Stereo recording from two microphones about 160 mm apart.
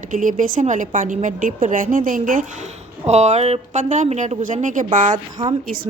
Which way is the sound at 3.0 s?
45° right (ahead or behind).